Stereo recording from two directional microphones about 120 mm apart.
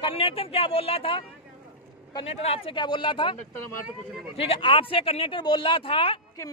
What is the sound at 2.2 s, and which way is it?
Speech, 55° left (ahead or behind).